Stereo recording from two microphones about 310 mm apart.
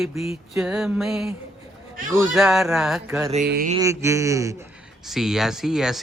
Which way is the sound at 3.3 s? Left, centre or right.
Right.